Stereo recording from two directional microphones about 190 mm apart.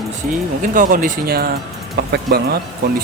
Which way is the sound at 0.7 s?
45° right (ahead or behind).